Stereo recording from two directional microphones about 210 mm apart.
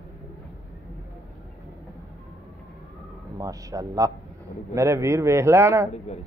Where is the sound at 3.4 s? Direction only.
15° right (ahead or behind).